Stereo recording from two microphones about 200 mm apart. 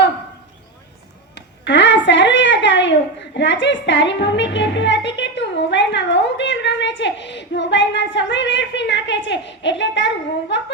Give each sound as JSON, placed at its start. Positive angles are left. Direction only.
{"t": 1.4, "sound": "a woman's voice", "side_deg": 60}